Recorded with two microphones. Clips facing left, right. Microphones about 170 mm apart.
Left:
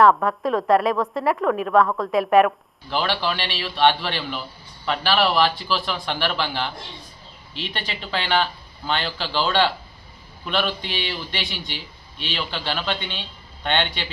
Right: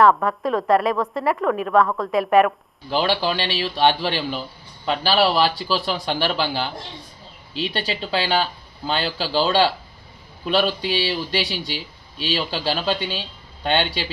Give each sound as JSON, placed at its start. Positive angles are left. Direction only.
{"t": 0.0, "sound": "a woman's voice", "side_deg": 0}
{"t": 2.9, "sound": "speech", "side_deg": -35}
{"t": 4.9, "sound": "speech", "side_deg": -35}